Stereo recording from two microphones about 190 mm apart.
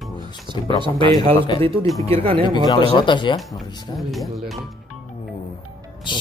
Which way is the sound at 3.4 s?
Centre (ahead or behind).